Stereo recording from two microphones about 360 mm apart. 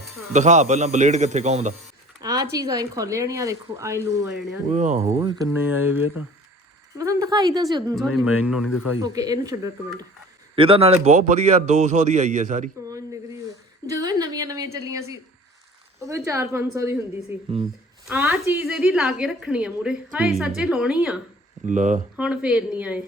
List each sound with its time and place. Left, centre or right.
0.3 s a man's voice: centre
4.7 s speech: centre
8.1 s speech: left
8.4 s a woman's voice: centre
13.8 s a sound: centre
16.0 s a woman's voice: centre
21.7 s a man's voice: right
22.1 s a woman's voice: centre